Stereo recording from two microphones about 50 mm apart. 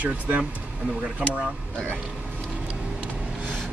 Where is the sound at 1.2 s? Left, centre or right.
Right.